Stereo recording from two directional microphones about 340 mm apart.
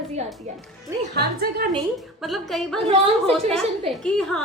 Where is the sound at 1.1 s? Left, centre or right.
Right.